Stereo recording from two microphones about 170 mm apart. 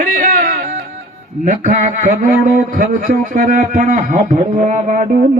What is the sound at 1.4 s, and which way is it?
Speech, 50° right (ahead or behind).